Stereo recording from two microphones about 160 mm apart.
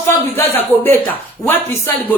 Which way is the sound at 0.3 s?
15° left (ahead or behind).